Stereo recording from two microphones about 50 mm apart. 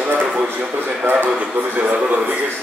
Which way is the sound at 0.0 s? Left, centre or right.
Right.